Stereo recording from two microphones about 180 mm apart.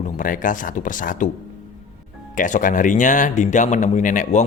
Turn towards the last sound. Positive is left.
turn(degrees=45)  # may be behind; listen again after turning